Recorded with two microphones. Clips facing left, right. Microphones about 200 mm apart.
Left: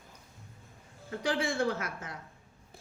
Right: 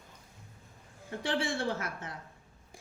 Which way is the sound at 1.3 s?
30° right (ahead or behind).